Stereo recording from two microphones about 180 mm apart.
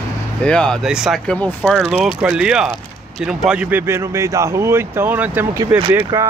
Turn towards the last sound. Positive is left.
turn(degrees=-15)  # may be behind; listen again after turning